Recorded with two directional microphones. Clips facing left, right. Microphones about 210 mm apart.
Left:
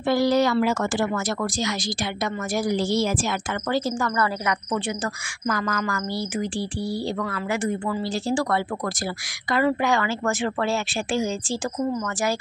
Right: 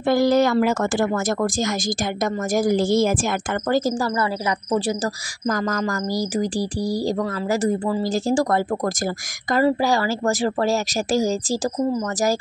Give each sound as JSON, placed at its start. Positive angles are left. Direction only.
{"t": 0.0, "sound": "speech", "side_deg": -50}